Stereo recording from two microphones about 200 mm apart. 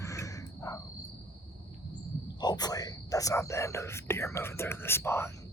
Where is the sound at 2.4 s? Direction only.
20° left (ahead or behind).